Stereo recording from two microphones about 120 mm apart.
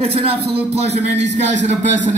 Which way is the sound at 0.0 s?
55° right (ahead or behind).